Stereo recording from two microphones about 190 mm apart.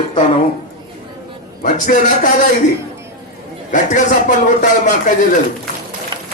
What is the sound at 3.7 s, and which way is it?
A man's voice, 45° left (ahead or behind).